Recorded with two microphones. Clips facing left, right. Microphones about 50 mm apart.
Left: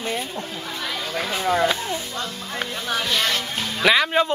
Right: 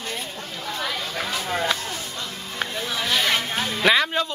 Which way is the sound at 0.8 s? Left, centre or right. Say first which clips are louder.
Left 1 dB; centre.